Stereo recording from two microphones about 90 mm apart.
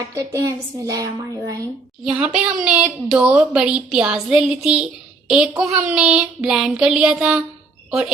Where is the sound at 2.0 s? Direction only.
10° right (ahead or behind).